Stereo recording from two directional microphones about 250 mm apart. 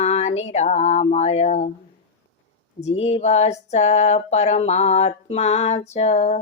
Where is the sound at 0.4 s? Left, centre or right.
Left.